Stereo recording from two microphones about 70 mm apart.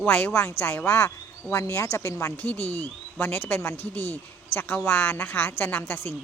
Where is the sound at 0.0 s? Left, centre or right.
Left.